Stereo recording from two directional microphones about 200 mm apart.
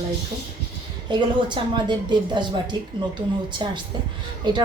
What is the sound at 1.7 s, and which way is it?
Speech, 20° right (ahead or behind).